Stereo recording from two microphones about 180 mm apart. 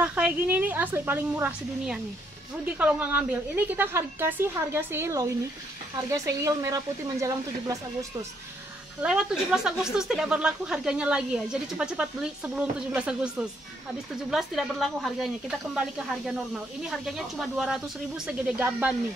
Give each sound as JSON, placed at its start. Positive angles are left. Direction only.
{"t": 0.0, "sound": "a woman's voice", "side_deg": -5}
{"t": 9.0, "sound": "speech", "side_deg": -5}
{"t": 14.3, "sound": "speech", "side_deg": 0}